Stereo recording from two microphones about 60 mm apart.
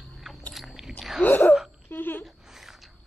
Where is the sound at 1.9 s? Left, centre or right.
Left.